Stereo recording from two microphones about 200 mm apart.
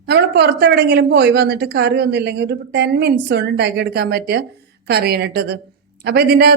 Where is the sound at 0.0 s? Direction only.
55° right (ahead or behind).